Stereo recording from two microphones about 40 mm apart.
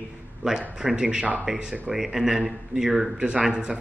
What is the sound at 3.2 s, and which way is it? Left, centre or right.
Speech, right.